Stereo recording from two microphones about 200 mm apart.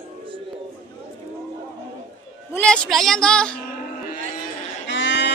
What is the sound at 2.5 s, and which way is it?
A woman's voice, 5° left (ahead or behind).